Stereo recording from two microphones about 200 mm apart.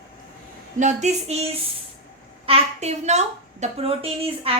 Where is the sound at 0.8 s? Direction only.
35° right (ahead or behind).